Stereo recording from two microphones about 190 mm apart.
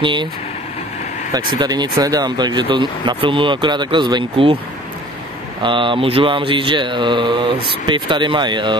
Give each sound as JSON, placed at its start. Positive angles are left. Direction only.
{"t": 0.0, "sound": "mantra", "side_deg": -25}
{"t": 1.5, "sound": "mantra", "side_deg": -20}
{"t": 5.6, "sound": "mantra", "side_deg": -25}